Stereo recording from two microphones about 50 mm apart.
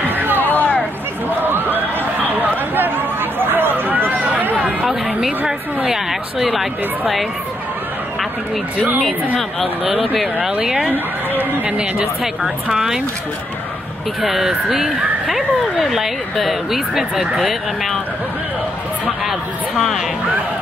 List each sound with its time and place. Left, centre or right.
0.1 s a sound: right
0.4 s a sound: left
1.4 s a sound: right
4.8 s chatter: centre
6.4 s speech: centre
9.6 s speech: centre
11.6 s a woman's voice: right
12.7 s speech: centre
14.2 s speech: centre